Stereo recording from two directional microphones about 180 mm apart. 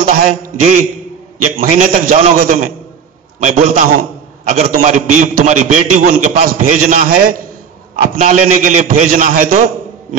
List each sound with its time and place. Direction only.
0.0 s a man's voice: 50° right (ahead or behind)